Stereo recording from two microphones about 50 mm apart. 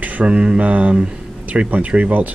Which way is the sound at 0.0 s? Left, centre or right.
Right.